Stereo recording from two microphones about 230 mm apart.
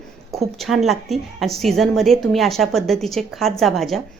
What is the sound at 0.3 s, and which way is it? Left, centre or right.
A woman's voice, centre.